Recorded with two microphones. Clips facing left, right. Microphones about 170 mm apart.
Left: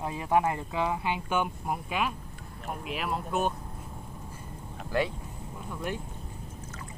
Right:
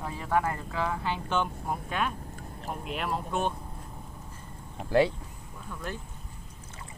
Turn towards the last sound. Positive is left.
turn(degrees=15)  # may be behind; listen again after turning